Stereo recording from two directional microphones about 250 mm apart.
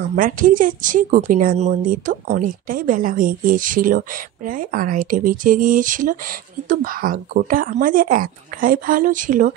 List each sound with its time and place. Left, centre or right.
0.1 s a woman's voice: right